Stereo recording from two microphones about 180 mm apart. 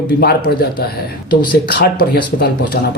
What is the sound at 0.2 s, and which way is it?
A man's voice, 60° left (ahead or behind).